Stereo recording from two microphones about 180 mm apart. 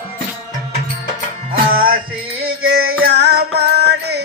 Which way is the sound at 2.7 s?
80° right.